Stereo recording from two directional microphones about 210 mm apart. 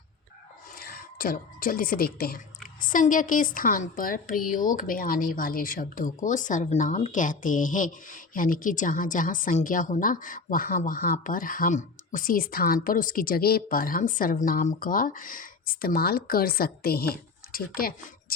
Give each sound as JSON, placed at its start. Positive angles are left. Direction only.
{"t": 0.8, "sound": "a woman's voice", "side_deg": 45}